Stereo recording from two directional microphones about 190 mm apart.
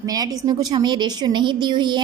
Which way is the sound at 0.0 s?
20° right (ahead or behind).